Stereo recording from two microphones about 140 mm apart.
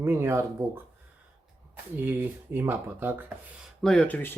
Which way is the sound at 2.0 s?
15° right (ahead or behind).